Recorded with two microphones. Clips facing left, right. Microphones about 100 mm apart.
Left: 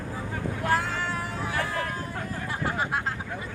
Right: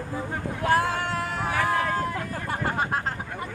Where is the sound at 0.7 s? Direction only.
60° right (ahead or behind); by 2.2 s 85° right.